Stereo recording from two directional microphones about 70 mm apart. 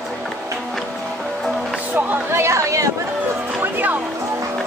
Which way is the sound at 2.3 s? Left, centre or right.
Right.